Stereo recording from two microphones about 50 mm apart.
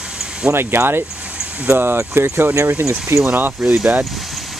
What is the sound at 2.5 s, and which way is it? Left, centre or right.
Speech, right.